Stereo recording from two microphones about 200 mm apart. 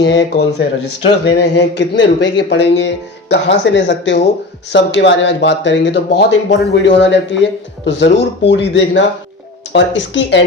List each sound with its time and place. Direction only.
0.0 s speech: 60° left (ahead or behind)